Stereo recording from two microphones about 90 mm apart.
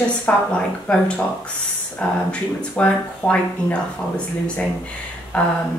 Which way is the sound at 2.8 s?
15° left (ahead or behind).